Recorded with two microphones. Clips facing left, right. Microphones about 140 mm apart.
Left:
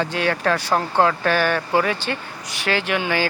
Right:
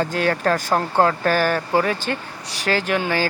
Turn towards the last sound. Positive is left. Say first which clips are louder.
# right 1 dB
turn(degrees=-40)  # may be behind; listen again after turning